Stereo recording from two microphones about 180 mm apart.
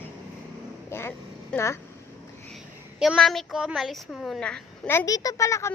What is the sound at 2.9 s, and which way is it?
A woman's voice, 5° right (ahead or behind).